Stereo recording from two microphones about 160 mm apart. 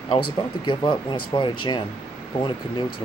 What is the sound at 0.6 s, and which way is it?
Speech, 30° left (ahead or behind).